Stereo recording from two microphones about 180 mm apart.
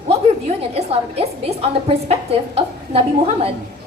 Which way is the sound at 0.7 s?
35° right (ahead or behind).